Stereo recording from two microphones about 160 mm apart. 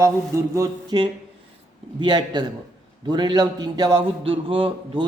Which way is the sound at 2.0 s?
30° right (ahead or behind).